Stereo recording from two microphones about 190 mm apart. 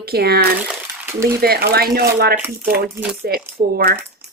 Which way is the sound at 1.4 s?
55° right (ahead or behind).